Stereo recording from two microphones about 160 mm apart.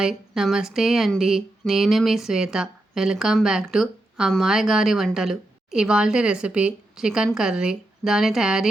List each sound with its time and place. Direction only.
0.0 s speech: 5° right (ahead or behind)